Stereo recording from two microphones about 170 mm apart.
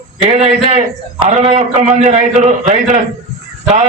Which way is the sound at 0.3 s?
40° right (ahead or behind).